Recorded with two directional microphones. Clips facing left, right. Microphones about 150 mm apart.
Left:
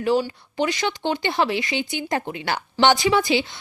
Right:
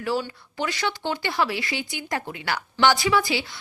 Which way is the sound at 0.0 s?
20° left (ahead or behind).